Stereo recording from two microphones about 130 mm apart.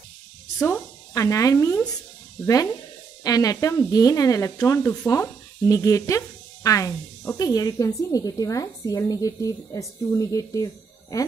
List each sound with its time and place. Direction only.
0.6 s speech: 15° left (ahead or behind)
1.1 s speech: 25° left (ahead or behind)